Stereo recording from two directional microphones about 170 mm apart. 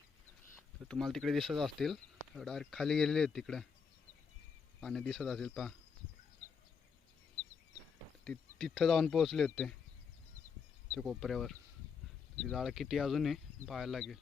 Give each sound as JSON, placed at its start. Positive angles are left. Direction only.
{"t": 0.9, "sound": "speech", "side_deg": 0}
{"t": 4.8, "sound": "speech", "side_deg": 5}
{"t": 8.2, "sound": "speech", "side_deg": 5}
{"t": 10.9, "sound": "speech", "side_deg": 0}